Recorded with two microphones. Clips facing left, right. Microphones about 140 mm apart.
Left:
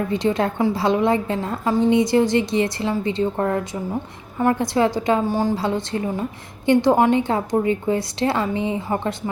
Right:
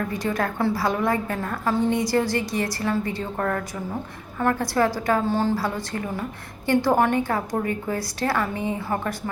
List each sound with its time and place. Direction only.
0.1 s a woman's voice: 25° left (ahead or behind)